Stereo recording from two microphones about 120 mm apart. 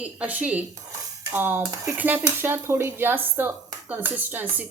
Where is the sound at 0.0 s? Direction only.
10° right (ahead or behind).